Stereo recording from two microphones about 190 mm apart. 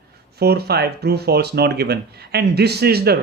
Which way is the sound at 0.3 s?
55° right (ahead or behind).